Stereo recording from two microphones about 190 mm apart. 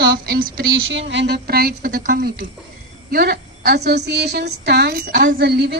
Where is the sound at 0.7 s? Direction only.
80° right.